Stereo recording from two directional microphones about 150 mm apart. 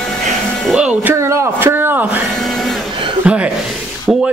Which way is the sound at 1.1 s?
20° right (ahead or behind).